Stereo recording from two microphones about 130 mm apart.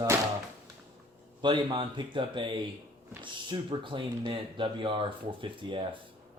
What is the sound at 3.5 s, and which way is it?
Speech, 40° right (ahead or behind).